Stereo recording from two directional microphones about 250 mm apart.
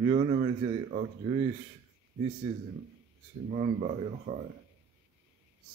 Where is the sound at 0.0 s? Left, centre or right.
Right.